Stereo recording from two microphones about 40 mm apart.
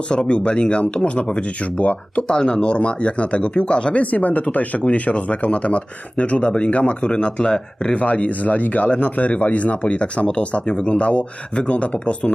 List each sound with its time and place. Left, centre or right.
0.1 s speech: left
7.9 s speech: left